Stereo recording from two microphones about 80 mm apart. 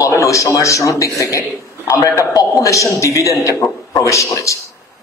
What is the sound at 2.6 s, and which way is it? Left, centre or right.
Speech, left.